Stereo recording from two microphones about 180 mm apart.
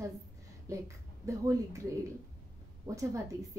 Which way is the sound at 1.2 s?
15° right (ahead or behind).